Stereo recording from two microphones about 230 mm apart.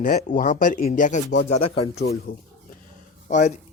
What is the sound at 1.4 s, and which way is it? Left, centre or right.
Speech, left.